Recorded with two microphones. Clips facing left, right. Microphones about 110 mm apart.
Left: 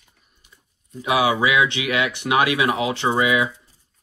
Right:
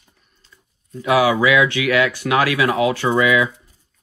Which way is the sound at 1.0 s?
25° left (ahead or behind).